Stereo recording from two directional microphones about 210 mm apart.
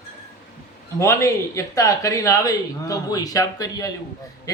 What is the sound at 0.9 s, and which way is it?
A man's voice, 15° left (ahead or behind).